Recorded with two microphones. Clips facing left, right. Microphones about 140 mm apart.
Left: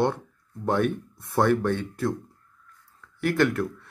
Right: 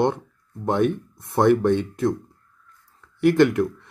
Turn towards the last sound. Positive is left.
turn(degrees=-15)  # may be behind; listen again after turning